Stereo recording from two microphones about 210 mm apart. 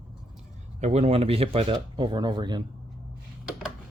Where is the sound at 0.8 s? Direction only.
30° right (ahead or behind).